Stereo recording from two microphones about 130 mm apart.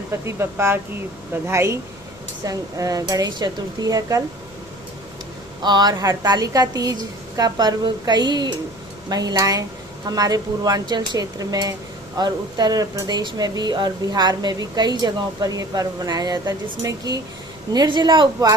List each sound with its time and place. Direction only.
0.1 s speech: 20° right (ahead or behind)
5.6 s speech: 35° right (ahead or behind)